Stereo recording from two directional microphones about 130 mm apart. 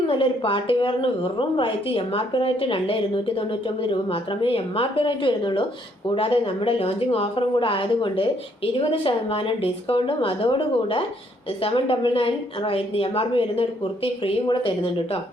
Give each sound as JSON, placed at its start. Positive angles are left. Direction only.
{"t": 0.1, "sound": "a woman's voice", "side_deg": 40}